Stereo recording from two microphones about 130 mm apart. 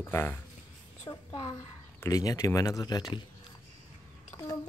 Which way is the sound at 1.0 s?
35° left (ahead or behind).